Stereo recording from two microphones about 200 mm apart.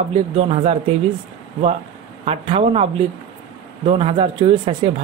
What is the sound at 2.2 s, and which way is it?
A man's voice, 30° right (ahead or behind).